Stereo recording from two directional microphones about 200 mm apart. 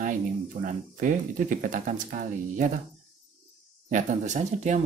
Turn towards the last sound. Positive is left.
turn(degrees=-35)  # may be behind; listen again after turning